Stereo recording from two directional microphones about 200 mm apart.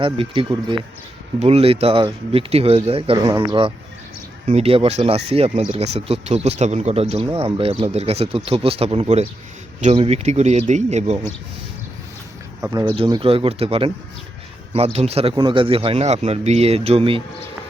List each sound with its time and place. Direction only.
0.0 s speech: 25° right (ahead or behind)
12.6 s speech: 20° right (ahead or behind)
14.9 s speech: 30° right (ahead or behind)